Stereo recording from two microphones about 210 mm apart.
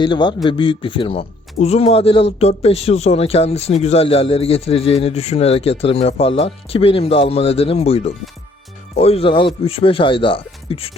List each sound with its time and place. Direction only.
0.0 s speech: 20° left (ahead or behind)